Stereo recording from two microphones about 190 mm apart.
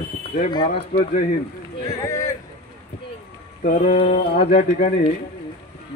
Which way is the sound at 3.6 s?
35° left (ahead or behind).